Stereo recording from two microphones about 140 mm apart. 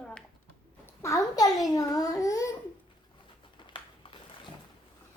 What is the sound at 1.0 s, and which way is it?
A child's voice, 25° left (ahead or behind).